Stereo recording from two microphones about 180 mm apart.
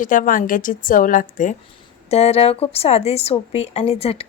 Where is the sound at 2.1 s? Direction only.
35° left (ahead or behind).